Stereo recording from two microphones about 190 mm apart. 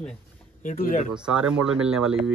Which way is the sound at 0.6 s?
45° left (ahead or behind).